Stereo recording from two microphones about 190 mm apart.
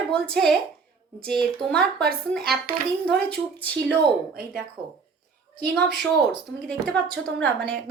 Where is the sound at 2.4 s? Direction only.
55° right (ahead or behind).